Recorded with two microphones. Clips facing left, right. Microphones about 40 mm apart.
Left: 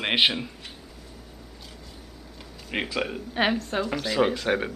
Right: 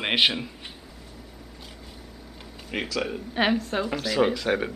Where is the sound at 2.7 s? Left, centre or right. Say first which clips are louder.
Left 1 dB; centre.